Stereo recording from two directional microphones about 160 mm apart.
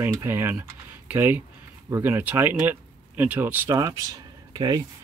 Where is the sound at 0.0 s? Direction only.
15° right (ahead or behind).